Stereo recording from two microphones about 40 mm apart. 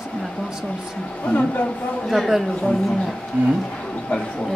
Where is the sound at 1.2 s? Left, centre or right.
Left.